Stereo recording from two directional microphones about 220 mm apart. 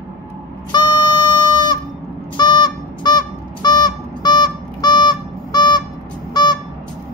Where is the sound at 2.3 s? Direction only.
20° left (ahead or behind).